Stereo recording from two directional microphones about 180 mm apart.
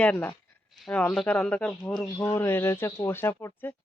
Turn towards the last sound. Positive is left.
turn(degrees=10)  # may be behind; listen again after turning